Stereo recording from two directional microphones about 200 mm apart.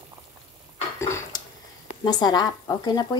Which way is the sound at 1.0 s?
15° left (ahead or behind).